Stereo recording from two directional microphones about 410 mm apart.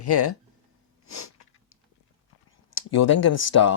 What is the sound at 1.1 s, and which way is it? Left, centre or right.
Sniff, left.